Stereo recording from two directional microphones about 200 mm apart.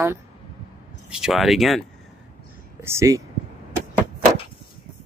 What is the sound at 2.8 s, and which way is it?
Speech, 15° right (ahead or behind).